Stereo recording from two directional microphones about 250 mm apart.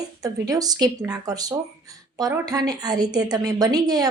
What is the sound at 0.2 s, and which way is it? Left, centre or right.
Speech, centre.